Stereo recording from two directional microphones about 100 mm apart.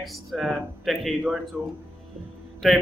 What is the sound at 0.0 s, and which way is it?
A man's voice, centre (ahead or behind).